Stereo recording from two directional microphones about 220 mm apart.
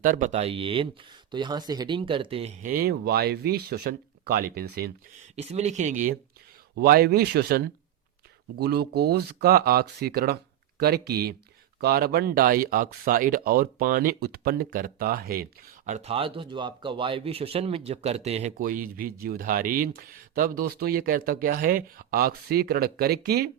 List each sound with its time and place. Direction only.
0.0 s speech: 35° right (ahead or behind)
5.4 s speech: 30° right (ahead or behind)
15.9 s speech: 30° right (ahead or behind)
18.6 s speech: 40° right (ahead or behind)